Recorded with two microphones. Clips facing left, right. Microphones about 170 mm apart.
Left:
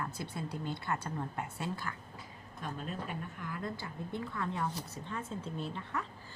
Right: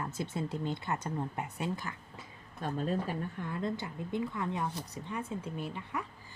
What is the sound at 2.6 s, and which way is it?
Speech, 35° right (ahead or behind).